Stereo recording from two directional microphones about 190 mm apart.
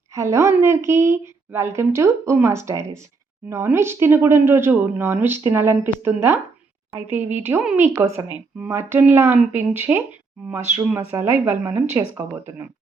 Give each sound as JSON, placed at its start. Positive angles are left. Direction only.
{"t": 0.1, "sound": "speech", "side_deg": -15}